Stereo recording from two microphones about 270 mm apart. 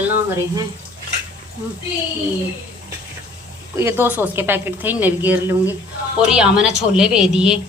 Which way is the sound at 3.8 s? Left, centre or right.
Centre.